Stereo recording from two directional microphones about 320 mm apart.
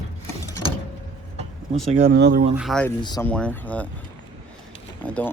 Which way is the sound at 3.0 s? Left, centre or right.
Centre.